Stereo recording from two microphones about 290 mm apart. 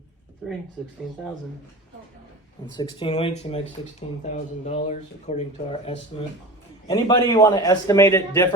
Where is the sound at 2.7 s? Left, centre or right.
Centre.